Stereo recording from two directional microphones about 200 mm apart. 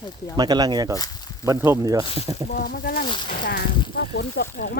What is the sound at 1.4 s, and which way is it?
Speech, 15° right (ahead or behind).